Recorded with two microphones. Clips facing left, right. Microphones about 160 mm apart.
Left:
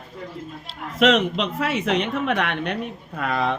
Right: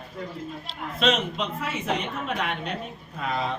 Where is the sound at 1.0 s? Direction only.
90° left; by 3.5 s 65° left (ahead or behind).